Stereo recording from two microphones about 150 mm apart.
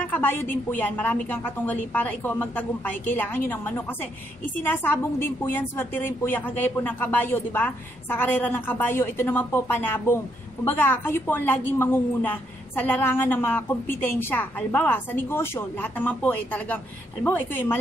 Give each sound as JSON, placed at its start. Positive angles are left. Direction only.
{"t": 0.1, "sound": "a woman's voice", "side_deg": 15}